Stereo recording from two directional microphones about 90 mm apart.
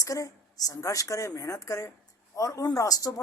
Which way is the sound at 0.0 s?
40° left (ahead or behind).